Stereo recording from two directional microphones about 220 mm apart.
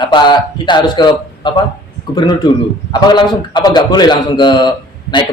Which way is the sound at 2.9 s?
20° left (ahead or behind).